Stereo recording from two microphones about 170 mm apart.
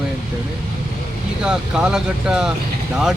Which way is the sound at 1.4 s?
5° right (ahead or behind).